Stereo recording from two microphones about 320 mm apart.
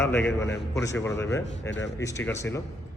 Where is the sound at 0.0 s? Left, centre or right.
Centre.